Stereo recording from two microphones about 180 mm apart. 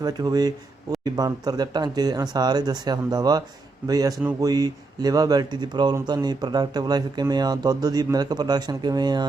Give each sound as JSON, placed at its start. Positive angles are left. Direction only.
{"t": 0.0, "sound": "speech", "side_deg": -20}